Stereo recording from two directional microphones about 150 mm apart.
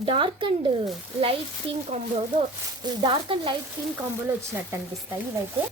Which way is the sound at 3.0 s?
35° right (ahead or behind).